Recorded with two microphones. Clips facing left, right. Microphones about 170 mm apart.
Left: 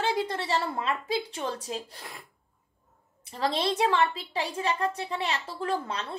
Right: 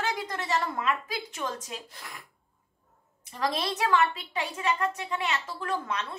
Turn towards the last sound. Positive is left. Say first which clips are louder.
# left 1 dB
turn(degrees=30)  # may be behind; listen again after turning